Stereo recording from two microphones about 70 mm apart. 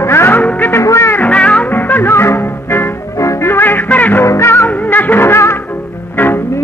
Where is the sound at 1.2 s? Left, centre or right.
Centre.